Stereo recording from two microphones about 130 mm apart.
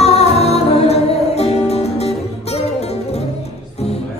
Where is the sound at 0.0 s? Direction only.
55° left (ahead or behind).